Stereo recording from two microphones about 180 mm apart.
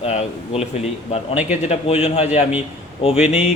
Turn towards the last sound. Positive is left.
turn(degrees=35)  # may be behind; listen again after turning